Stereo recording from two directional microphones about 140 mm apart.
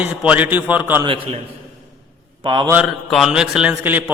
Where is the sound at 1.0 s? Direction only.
40° right (ahead or behind).